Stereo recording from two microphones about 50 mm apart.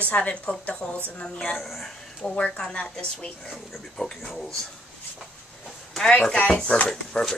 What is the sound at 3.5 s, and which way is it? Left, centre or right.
Speech, centre.